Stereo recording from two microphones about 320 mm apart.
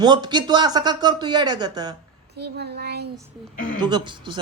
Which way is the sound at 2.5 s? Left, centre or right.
Right.